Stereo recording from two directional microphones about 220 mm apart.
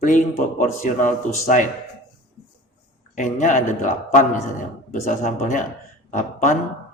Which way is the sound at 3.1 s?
35° left (ahead or behind).